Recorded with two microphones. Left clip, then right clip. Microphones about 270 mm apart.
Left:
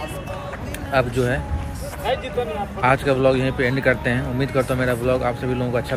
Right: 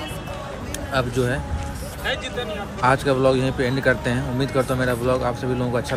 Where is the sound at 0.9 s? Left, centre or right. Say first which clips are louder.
Left 3 dB; centre.